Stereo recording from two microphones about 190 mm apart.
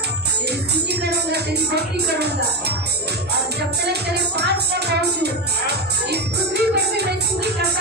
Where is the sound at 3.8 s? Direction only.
60° right (ahead or behind).